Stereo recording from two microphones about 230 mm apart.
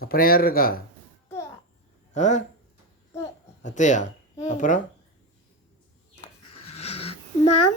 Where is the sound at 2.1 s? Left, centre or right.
Left.